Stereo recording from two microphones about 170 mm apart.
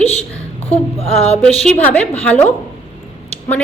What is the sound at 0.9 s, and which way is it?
Music, 35° left (ahead or behind).